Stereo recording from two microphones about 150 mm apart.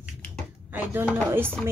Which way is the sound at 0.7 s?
10° right (ahead or behind).